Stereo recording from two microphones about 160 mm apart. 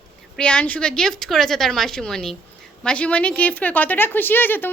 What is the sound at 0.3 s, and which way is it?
A woman's voice, 5° left (ahead or behind).